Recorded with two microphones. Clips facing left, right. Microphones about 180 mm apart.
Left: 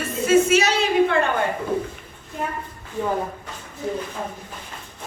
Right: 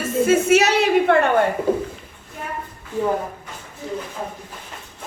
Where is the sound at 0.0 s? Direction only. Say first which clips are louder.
Even; 55° right (ahead or behind).